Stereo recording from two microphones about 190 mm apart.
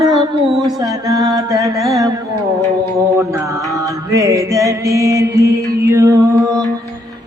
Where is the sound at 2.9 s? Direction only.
15° right (ahead or behind).